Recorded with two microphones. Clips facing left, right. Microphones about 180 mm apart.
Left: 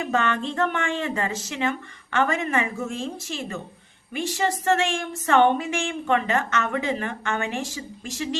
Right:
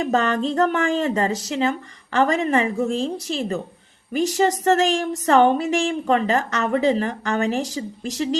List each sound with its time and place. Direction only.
0.0 s speech: 35° right (ahead or behind)